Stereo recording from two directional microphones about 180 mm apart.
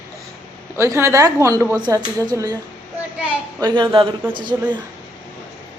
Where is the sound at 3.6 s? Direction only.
25° right (ahead or behind).